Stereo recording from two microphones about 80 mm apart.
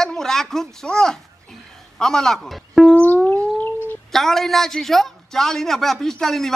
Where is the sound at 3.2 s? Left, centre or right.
Left.